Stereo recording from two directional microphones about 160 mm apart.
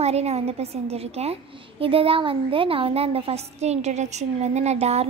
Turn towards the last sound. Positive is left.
turn(degrees=-40)  # may be behind; listen again after turning